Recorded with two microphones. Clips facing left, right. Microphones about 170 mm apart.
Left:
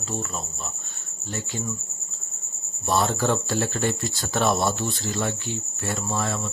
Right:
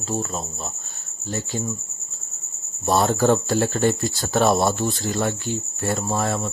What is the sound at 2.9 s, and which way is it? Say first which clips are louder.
Speech: right 5 dB; 40° right (ahead or behind).